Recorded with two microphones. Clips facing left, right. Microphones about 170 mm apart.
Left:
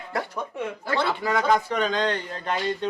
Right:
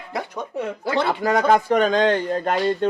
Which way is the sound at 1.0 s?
50° right (ahead or behind).